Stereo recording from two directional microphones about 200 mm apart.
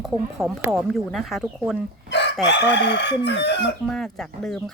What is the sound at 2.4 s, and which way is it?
Chicken, 60° left (ahead or behind).